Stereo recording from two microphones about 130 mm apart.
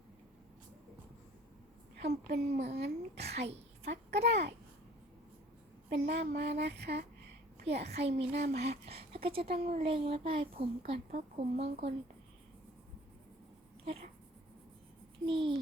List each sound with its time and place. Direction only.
2.0 s a woman's voice: 60° right (ahead or behind)
5.9 s speech: 60° right (ahead or behind)
13.8 s speech: 50° right (ahead or behind)
15.3 s a child's voice: 40° right (ahead or behind)